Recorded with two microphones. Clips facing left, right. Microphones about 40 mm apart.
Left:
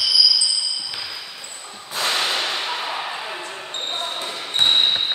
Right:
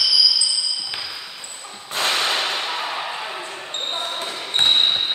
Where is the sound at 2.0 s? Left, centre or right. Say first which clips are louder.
Right 1 dB; right.